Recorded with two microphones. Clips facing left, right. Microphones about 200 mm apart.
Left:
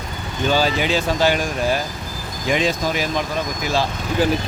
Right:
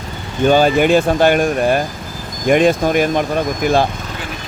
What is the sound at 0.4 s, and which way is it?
Speech, 55° right (ahead or behind).